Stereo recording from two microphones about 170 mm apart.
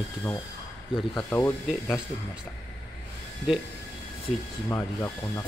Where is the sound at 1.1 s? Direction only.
10° left (ahead or behind).